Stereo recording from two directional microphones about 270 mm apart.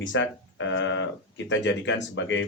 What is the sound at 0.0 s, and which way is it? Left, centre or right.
Speech, left.